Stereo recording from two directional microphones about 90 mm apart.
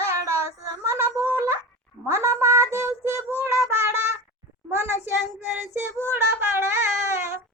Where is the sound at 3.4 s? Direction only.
30° right (ahead or behind).